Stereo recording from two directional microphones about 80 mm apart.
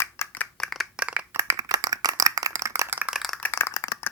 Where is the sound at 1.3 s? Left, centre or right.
Right.